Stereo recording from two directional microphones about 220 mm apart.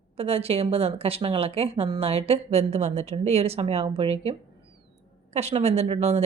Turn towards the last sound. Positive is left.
turn(degrees=-30)  # may be behind; listen again after turning